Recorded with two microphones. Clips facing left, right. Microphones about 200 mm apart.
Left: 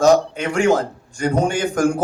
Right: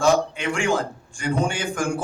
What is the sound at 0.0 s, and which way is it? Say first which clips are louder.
A man's voice: left 5 dB; 40° left (ahead or behind).